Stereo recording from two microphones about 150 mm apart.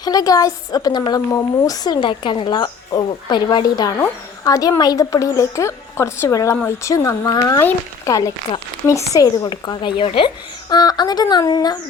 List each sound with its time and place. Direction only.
0.0 s speech: 25° left (ahead or behind)